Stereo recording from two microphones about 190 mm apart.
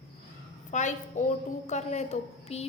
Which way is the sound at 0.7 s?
40° left (ahead or behind).